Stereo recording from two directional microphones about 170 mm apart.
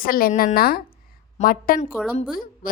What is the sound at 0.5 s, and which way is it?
Speech, 60° left (ahead or behind).